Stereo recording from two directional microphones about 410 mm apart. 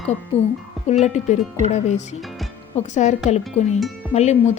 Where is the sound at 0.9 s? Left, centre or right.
Centre.